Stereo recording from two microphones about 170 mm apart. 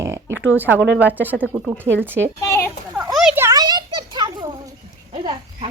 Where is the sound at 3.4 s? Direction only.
20° right (ahead or behind).